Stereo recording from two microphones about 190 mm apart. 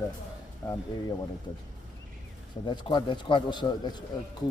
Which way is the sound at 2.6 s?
25° left (ahead or behind).